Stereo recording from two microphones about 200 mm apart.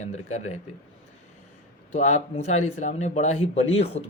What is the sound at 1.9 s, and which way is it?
Speech, 35° left (ahead or behind).